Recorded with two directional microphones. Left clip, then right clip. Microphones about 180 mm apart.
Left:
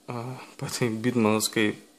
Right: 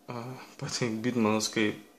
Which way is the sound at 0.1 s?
50° left (ahead or behind).